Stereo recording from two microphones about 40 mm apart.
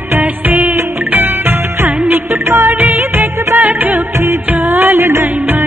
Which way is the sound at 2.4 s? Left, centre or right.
Right.